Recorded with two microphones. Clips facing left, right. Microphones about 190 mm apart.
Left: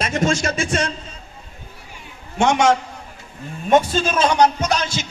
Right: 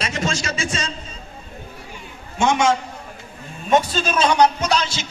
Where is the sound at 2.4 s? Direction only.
65° left (ahead or behind).